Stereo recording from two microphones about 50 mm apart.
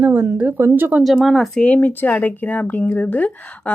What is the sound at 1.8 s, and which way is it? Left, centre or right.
Speech, left.